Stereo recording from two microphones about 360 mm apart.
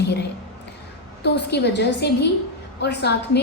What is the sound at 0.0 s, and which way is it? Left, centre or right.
A woman's voice, left.